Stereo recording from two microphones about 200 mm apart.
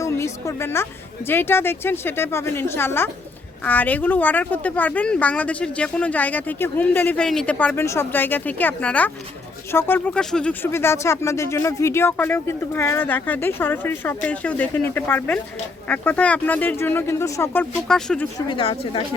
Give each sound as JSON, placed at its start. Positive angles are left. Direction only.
{"t": 0.0, "sound": "a sound", "side_deg": 15}
{"t": 1.3, "sound": "speech", "side_deg": 10}
{"t": 18.3, "sound": "a woman's voice", "side_deg": 25}